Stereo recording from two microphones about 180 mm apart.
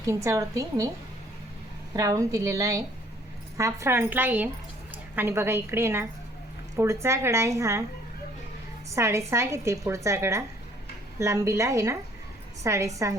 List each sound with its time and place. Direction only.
0.0 s a woman's voice: 20° right (ahead or behind)
1.9 s a woman's voice: 20° right (ahead or behind)
9.0 s a woman's voice: 15° right (ahead or behind)